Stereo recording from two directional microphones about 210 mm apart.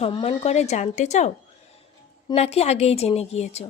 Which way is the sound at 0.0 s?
25° left (ahead or behind).